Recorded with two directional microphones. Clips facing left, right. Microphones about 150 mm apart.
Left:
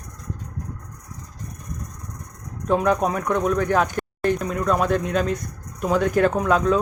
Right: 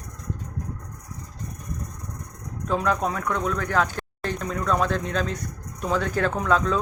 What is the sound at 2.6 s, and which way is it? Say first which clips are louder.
Speech: left 4 dB; 20° left (ahead or behind).